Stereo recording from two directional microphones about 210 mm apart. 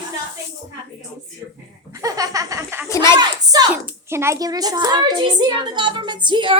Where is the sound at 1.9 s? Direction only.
15° right (ahead or behind).